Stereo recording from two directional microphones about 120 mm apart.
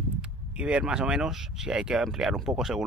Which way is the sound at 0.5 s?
10° right (ahead or behind).